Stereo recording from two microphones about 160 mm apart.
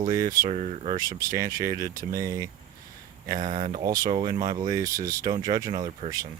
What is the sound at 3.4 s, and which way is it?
Speech, 50° right (ahead or behind).